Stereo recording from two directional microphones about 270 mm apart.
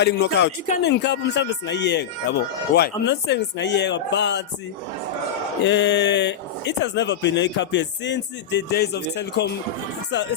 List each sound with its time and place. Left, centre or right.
0.0 s speech: left
5.6 s speech: left